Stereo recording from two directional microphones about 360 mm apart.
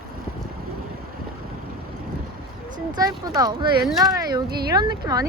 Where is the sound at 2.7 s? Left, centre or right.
Centre.